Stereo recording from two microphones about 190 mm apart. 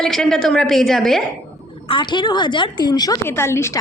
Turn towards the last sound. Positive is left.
turn(degrees=15)  # may be behind; listen again after turning